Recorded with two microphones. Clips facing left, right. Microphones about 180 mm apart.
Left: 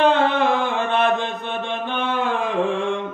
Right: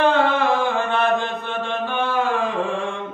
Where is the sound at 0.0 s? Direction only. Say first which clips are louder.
Left 1 dB; 20° left (ahead or behind).